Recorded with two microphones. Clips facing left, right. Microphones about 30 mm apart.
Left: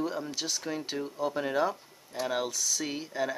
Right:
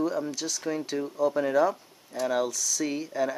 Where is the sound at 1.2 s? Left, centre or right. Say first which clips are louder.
Right 6 dB; left.